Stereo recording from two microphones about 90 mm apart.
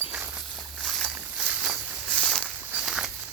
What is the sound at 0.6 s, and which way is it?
Walk, centre (ahead or behind).